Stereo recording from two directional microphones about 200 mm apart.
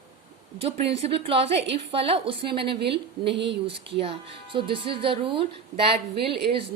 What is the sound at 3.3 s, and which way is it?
Speech, 60° right (ahead or behind).